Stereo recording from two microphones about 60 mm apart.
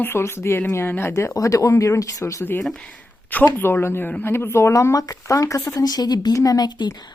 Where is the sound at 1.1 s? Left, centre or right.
Left.